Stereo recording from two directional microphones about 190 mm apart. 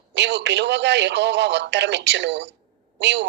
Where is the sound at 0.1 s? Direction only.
70° right (ahead or behind).